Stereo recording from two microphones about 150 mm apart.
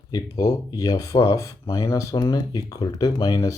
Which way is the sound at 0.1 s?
25° left (ahead or behind).